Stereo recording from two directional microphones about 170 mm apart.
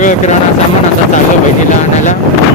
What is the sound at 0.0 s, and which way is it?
Speech, 50° left (ahead or behind).